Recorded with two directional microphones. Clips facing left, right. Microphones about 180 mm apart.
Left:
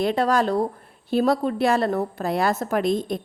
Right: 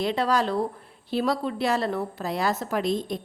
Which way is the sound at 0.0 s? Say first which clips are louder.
Left 3 dB; 50° left (ahead or behind).